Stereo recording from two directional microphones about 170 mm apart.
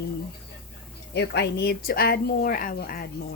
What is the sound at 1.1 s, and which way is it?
Speech, 85° left.